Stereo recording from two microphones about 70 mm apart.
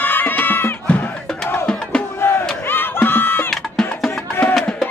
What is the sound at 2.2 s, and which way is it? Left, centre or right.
Battle cry, left.